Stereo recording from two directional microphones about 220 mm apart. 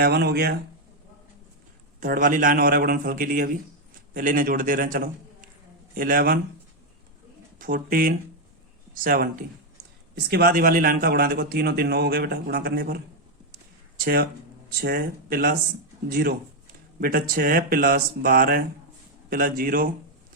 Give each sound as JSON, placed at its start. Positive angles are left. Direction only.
{"t": 0.0, "sound": "speech", "side_deg": -45}
{"t": 2.0, "sound": "speech", "side_deg": -40}
{"t": 7.6, "sound": "speech", "side_deg": -40}
{"t": 14.0, "sound": "speech", "side_deg": -45}